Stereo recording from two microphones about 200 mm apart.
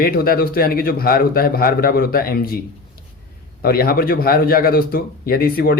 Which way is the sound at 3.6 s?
50° left (ahead or behind).